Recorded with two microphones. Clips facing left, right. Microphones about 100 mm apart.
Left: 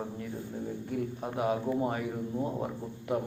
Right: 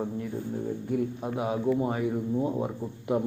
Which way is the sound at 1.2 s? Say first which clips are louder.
Right 2 dB; 5° right (ahead or behind).